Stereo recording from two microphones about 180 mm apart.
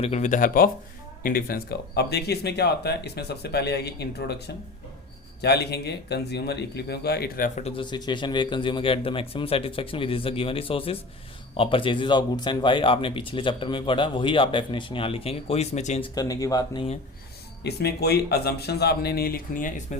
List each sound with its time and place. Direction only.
0.0 s speech: 40° left (ahead or behind); by 4.4 s 65° left (ahead or behind)
5.4 s speech: 65° left (ahead or behind); by 7.6 s 50° left (ahead or behind)
7.6 s speech: 25° left (ahead or behind)
16.1 s speech: 20° left (ahead or behind)
17.6 s speech: 65° left (ahead or behind); by 20.0 s 45° left (ahead or behind)